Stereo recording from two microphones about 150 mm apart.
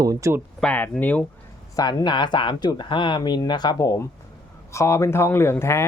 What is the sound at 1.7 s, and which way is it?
Speech, 25° left (ahead or behind).